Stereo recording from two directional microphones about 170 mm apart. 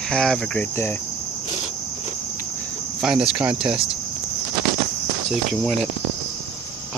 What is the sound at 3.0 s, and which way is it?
Speech, 5° right (ahead or behind).